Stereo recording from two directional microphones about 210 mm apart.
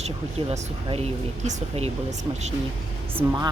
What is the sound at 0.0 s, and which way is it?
Speech, 30° right (ahead or behind).